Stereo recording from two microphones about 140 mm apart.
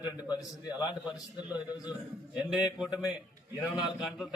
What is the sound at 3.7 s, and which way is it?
Speech, 5° right (ahead or behind).